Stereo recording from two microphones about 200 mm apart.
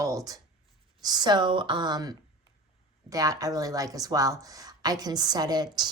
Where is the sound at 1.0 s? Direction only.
20° right (ahead or behind).